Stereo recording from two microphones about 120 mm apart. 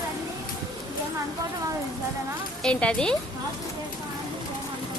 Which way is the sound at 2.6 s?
10° left (ahead or behind).